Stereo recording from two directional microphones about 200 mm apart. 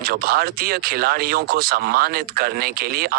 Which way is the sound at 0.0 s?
50° right (ahead or behind).